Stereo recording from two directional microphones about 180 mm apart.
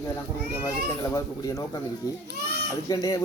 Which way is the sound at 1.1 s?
20° left (ahead or behind).